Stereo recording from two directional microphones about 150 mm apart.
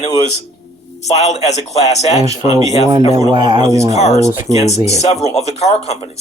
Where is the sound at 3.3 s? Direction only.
30° right (ahead or behind).